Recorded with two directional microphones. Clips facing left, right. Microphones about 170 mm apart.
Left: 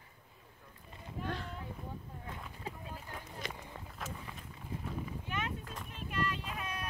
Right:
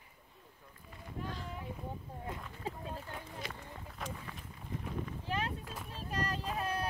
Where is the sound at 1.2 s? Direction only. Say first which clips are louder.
Left 3 dB; 65° left (ahead or behind).